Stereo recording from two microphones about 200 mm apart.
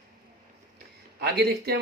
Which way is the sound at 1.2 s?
55° right (ahead or behind).